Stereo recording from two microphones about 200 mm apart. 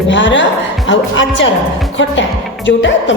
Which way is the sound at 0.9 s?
65° left (ahead or behind).